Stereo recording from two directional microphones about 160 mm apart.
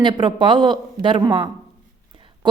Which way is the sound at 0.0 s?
30° right (ahead or behind).